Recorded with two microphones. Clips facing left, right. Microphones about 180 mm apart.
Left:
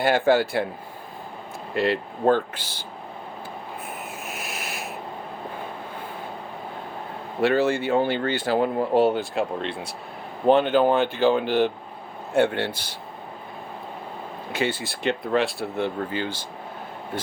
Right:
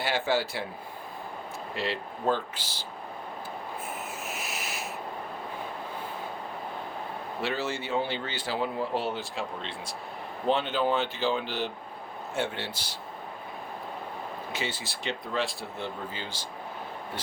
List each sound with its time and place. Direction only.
0.0 s speech: 55° left (ahead or behind)
1.7 s speech: 55° left (ahead or behind)
4.3 s a sound: 55° left (ahead or behind)
7.4 s speech: 55° left (ahead or behind)
14.5 s speech: 60° left (ahead or behind)